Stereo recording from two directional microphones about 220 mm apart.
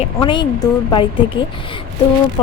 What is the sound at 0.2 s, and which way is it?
Speech, 20° left (ahead or behind).